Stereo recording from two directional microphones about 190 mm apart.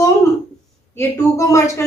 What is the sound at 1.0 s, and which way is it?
Speech, 15° left (ahead or behind).